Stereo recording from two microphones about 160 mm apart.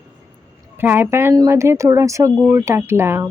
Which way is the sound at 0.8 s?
15° right (ahead or behind).